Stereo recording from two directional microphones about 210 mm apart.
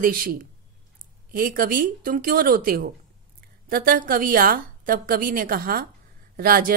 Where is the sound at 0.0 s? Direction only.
45° right (ahead or behind).